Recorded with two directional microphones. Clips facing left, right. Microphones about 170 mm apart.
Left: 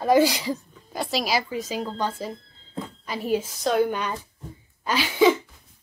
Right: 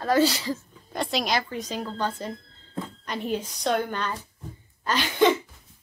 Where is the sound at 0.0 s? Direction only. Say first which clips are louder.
Left 3 dB; 15° left (ahead or behind).